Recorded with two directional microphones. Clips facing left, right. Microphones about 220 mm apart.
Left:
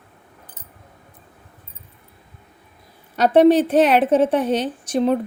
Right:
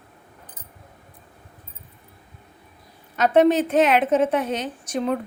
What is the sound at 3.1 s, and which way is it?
A woman's voice, 30° left (ahead or behind).